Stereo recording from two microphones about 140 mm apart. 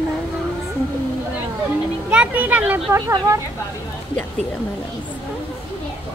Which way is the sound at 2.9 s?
25° right (ahead or behind).